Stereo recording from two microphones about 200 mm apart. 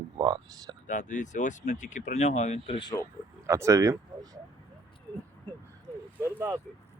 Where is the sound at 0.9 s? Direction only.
40° left (ahead or behind); by 3.1 s 20° left (ahead or behind).